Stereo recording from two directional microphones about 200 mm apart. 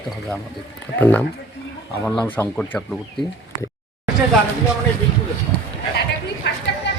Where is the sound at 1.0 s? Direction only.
10° left (ahead or behind).